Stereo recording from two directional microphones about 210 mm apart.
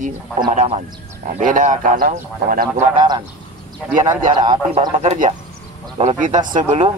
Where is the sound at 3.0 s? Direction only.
20° right (ahead or behind).